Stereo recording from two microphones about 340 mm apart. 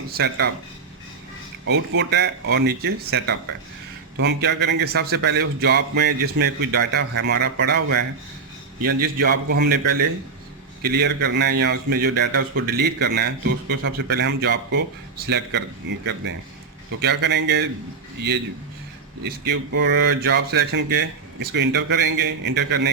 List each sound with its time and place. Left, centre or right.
0.1 s speech: right
1.6 s speech: right
10.8 s a man's voice: right
19.5 s speech: right